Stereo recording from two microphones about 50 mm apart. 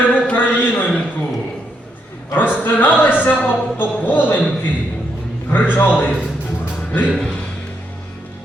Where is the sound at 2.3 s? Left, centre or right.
Left.